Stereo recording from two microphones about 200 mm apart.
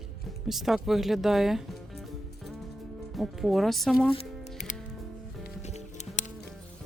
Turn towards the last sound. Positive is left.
turn(degrees=35)  # may be behind; listen again after turning